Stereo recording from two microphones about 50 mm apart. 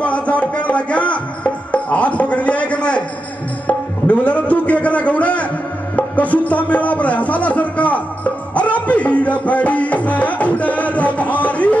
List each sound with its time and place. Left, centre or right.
0.0 s music: left
3.6 s tabla: left
5.9 s music: left